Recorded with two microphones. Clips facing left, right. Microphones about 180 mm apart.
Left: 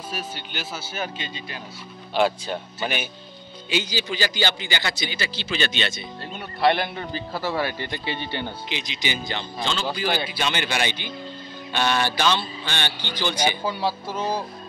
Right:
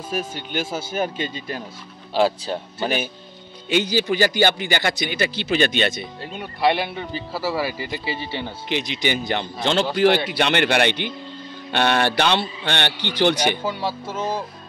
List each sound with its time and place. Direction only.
0.1 s speech: 50° right (ahead or behind)
2.1 s speech: 35° right (ahead or behind)
3.6 s speech: 60° right (ahead or behind)
6.4 s speech: 10° right (ahead or behind)
8.6 s speech: 60° right (ahead or behind)
13.7 s speech: centre (ahead or behind)